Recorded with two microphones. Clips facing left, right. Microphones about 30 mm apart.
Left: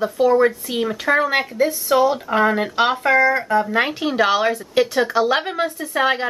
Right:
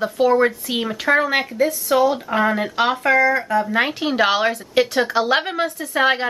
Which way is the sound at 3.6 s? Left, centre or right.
Centre.